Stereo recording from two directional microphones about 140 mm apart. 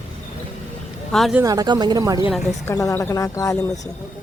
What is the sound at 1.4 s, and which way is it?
Speech, 30° right (ahead or behind).